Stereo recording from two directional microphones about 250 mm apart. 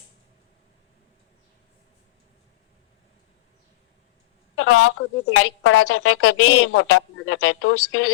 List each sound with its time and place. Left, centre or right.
4.5 s a woman's voice: left